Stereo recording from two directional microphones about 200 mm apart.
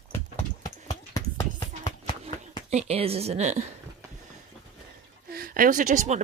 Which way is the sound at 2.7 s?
30° right (ahead or behind).